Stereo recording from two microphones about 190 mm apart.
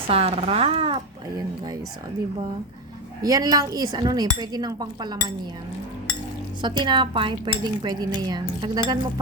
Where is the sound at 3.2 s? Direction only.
20° right (ahead or behind).